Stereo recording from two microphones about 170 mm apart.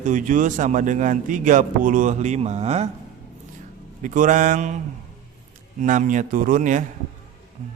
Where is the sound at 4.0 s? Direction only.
50° right (ahead or behind).